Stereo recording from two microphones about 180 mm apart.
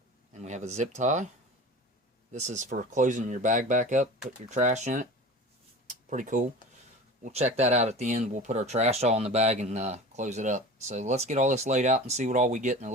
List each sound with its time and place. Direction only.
0.3 s speech: 40° right (ahead or behind)
2.3 s speech: 40° right (ahead or behind)
5.9 s a sound: 45° right (ahead or behind)
7.2 s speech: 40° right (ahead or behind)